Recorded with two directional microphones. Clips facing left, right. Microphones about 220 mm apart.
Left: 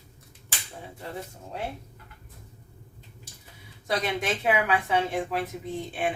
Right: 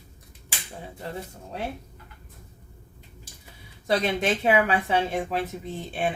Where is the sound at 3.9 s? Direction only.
30° right (ahead or behind).